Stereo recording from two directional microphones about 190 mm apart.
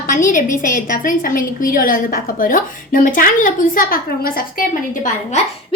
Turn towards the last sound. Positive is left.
turn(degrees=45)  # may be behind; listen again after turning